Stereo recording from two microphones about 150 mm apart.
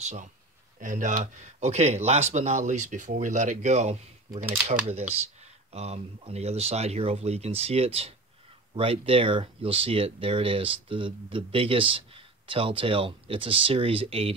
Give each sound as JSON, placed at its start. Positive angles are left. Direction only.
{"t": 0.0, "sound": "speech", "side_deg": -55}